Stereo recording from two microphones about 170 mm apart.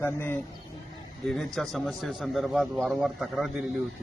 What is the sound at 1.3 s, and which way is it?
A man's voice, centre (ahead or behind).